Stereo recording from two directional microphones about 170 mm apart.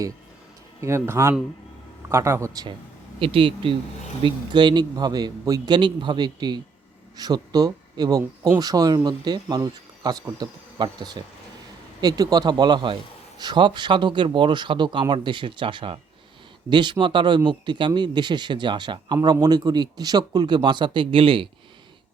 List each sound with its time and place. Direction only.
0.8 s a man's voice: 15° right (ahead or behind); by 21.5 s 30° right (ahead or behind)